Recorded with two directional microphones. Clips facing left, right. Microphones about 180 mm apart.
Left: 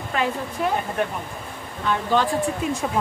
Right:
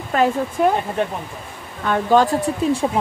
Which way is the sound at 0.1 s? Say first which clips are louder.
Right 7 dB; 45° right (ahead or behind).